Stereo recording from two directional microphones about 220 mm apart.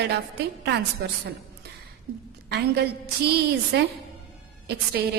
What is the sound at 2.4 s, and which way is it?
A woman's voice, 50° right (ahead or behind).